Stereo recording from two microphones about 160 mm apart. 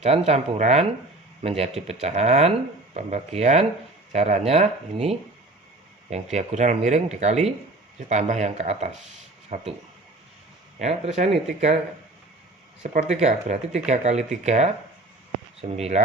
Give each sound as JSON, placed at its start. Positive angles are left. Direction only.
{"t": 0.0, "sound": "speech", "side_deg": -40}
{"t": 6.3, "sound": "speech", "side_deg": -45}
{"t": 10.8, "sound": "speech", "side_deg": -45}
{"t": 12.8, "sound": "speech", "side_deg": -55}